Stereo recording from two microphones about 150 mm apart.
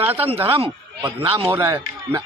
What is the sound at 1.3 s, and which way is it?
Speech, 25° right (ahead or behind).